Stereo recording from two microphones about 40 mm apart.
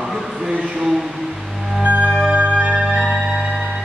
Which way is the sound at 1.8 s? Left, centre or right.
Right.